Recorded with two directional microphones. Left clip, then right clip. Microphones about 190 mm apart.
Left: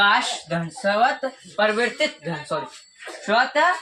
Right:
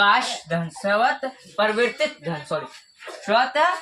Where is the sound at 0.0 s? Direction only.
25° right (ahead or behind).